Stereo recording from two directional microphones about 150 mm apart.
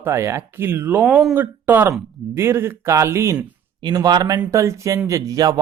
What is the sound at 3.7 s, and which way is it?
Speech, 30° right (ahead or behind).